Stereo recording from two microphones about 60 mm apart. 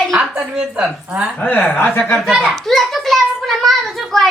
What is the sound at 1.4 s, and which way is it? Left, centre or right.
Speech, left.